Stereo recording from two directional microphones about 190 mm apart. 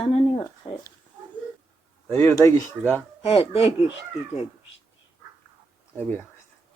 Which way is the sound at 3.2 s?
30° left (ahead or behind).